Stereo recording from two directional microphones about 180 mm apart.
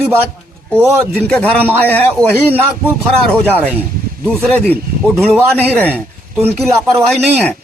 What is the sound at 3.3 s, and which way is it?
A man's voice, 5° left (ahead or behind).